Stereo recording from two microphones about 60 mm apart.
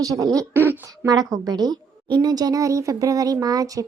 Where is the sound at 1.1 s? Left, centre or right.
Right.